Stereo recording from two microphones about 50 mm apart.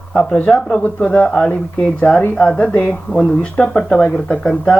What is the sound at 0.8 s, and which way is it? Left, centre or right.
Speech, left.